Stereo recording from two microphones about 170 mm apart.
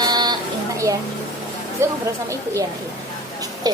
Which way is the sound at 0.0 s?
25° right (ahead or behind).